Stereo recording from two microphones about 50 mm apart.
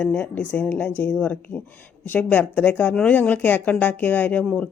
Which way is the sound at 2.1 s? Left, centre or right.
Left.